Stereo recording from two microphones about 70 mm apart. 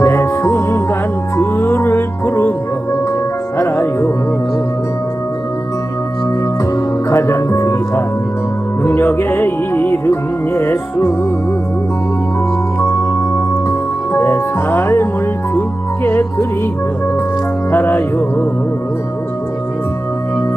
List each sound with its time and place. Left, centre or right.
0.0 s music: left
6.7 s music: left
12.8 s music: left
16.0 s music: left
17.7 s music: left